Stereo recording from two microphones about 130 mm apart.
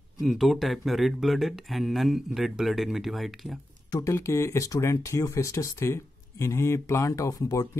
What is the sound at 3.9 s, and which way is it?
Speech, 20° left (ahead or behind).